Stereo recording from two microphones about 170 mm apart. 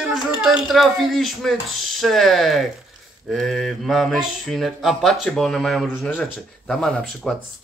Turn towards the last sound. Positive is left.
turn(degrees=0)  # may be behind; listen again after turning